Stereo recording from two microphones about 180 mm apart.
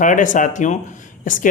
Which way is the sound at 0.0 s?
45° left (ahead or behind).